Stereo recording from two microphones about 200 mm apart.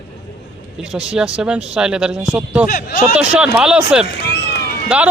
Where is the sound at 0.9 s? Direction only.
5° right (ahead or behind).